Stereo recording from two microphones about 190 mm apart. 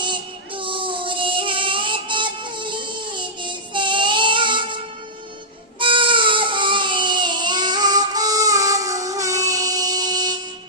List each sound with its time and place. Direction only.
0.0 s music: 25° right (ahead or behind)
3.4 s child singing: 25° right (ahead or behind)
5.8 s baby cry: 25° right (ahead or behind)